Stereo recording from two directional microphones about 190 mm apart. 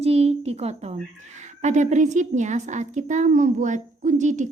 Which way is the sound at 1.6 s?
40° right (ahead or behind).